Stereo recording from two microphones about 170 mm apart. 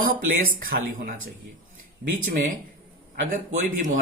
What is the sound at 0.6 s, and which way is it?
Speech, 55° right (ahead or behind).